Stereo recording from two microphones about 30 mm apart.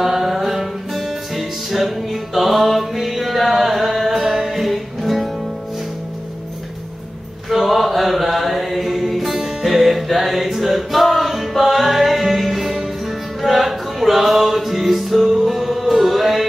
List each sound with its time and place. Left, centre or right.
0.0 s music: centre
4.4 s music: centre
4.6 s music: centre
7.4 s music: centre
12.6 s music: centre
13.4 s music: centre